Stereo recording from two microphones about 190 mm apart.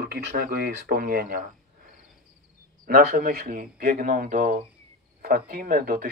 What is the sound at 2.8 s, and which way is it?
Speech, 55° right (ahead or behind).